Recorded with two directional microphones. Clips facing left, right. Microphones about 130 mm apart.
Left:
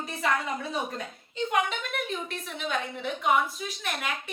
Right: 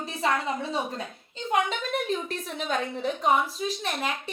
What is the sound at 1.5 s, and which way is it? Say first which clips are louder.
A woman's voice: right 4 dB; 35° right (ahead or behind).